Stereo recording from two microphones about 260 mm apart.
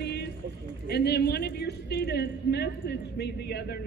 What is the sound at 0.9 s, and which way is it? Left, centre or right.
A man's voice, left.